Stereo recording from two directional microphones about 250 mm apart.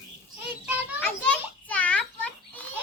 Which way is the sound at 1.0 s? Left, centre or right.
Centre.